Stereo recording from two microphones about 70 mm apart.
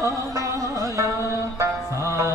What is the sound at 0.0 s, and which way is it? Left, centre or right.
Music, right.